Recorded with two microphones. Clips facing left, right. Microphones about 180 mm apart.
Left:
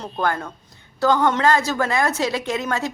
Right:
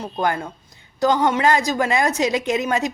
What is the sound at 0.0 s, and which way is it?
A woman's voice, 15° right (ahead or behind).